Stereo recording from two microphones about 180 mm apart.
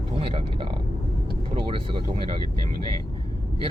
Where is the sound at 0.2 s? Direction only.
30° right (ahead or behind).